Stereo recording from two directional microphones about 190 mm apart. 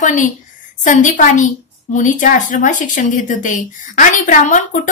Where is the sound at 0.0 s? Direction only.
40° left (ahead or behind).